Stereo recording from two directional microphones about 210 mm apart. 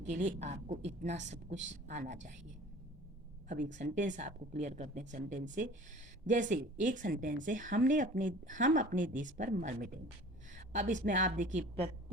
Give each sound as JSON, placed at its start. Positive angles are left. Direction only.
{"t": 0.0, "sound": "speech", "side_deg": -35}
{"t": 3.7, "sound": "speech", "side_deg": -35}